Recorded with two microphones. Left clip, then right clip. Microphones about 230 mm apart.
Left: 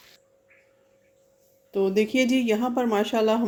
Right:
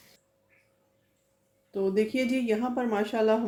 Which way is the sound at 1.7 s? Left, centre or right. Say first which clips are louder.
Left 5 dB; left.